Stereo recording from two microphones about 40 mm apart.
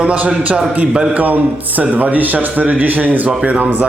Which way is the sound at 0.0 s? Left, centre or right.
Right.